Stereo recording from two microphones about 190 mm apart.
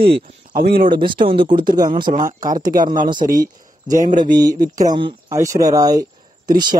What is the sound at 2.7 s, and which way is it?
A man's voice, 50° right (ahead or behind).